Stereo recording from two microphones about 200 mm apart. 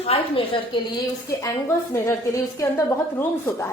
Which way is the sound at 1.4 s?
10° left (ahead or behind).